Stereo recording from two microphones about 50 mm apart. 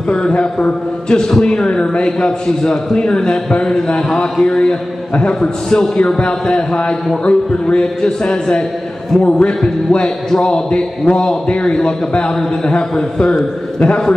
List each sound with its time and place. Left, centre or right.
0.1 s a man's voice: centre
4.1 s mantra: centre
5.1 s a man's voice: left